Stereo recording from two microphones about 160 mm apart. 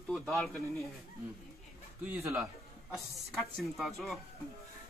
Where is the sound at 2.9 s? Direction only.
Centre (ahead or behind).